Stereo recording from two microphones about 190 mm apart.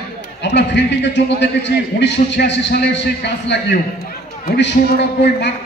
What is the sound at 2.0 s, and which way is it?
A man's voice, 65° left (ahead or behind).